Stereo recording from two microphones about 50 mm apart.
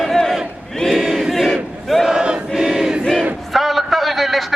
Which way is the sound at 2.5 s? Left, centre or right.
Centre.